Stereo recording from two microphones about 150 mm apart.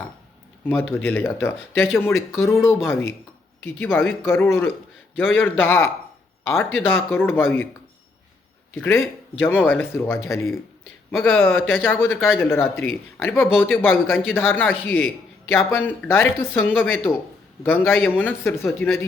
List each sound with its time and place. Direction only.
0.6 s a man's voice: 10° left (ahead or behind)
8.7 s a man's voice: 10° left (ahead or behind)